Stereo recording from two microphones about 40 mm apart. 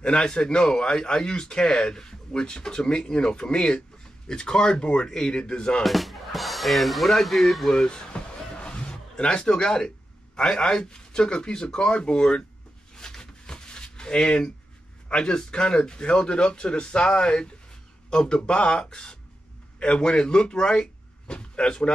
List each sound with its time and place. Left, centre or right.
0.0 s speech: centre
5.9 s speech: centre
7.7 s speech: left
12.9 s a sound: centre
15.0 s speech: left